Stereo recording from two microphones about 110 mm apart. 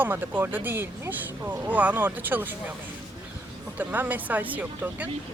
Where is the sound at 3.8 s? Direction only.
15° right (ahead or behind).